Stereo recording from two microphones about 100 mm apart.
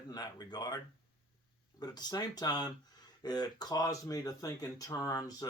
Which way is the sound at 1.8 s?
45° left (ahead or behind).